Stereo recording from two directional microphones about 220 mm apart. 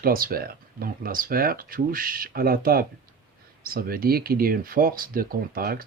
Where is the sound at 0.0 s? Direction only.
40° right (ahead or behind).